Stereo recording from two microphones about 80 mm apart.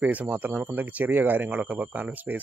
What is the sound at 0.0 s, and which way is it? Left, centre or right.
A man's voice, centre.